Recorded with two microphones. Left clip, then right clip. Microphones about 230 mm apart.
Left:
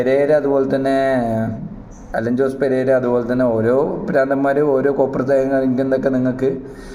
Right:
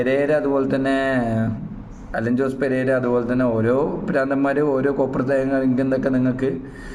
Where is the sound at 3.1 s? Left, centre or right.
Centre.